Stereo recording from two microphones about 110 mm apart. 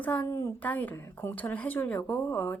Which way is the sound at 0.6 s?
15° left (ahead or behind).